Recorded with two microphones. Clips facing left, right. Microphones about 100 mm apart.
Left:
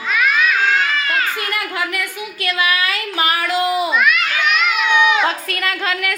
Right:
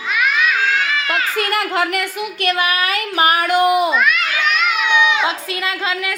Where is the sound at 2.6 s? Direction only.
50° right (ahead or behind).